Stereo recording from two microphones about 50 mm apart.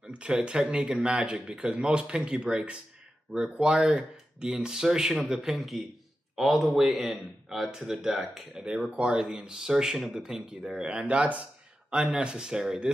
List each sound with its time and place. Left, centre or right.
0.0 s speech: right
8.9 s speech: right